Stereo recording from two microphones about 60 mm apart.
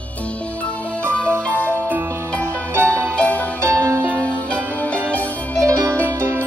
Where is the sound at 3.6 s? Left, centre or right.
Right.